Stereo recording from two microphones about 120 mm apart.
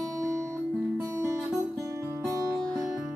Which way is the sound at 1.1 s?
20° right (ahead or behind).